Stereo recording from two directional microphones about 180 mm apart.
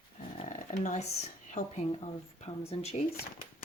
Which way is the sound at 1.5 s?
40° left (ahead or behind).